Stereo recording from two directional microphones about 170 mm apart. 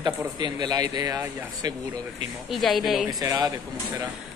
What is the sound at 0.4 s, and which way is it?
Speech, 25° right (ahead or behind).